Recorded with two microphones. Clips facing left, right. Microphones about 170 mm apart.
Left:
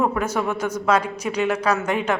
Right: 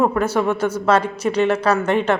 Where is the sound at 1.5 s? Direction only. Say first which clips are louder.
Right 3 dB; 30° right (ahead or behind).